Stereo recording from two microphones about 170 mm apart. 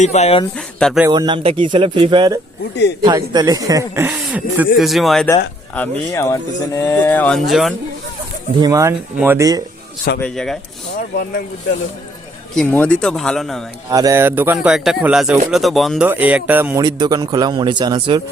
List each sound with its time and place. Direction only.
0.0 s speech: 40° left (ahead or behind)
0.5 s speech: 5° left (ahead or behind)
1.1 s a man's voice: 25° right (ahead or behind)
4.1 s speech: 5° right (ahead or behind)
5.7 s speech: 10° left (ahead or behind)
8.6 s speech: 20° right (ahead or behind)
10.2 s speech: 5° left (ahead or behind)
12.5 s speech: 5° left (ahead or behind)
13.9 s speech: 20° right (ahead or behind)
16.8 s a man's voice: 25° right (ahead or behind)